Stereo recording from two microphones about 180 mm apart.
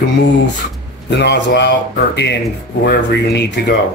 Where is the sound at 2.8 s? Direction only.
65° left (ahead or behind).